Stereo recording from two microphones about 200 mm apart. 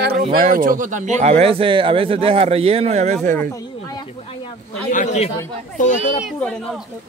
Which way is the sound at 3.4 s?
15° left (ahead or behind).